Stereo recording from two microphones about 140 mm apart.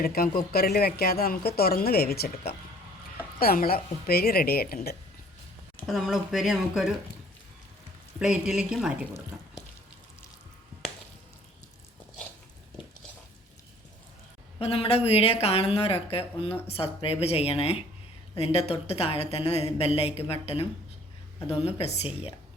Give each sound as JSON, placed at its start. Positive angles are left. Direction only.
{"t": 0.0, "sound": "speech", "side_deg": 90}
{"t": 5.8, "sound": "speech", "side_deg": 0}
{"t": 8.2, "sound": "speech", "side_deg": -5}
{"t": 14.6, "sound": "a woman's voice", "side_deg": 45}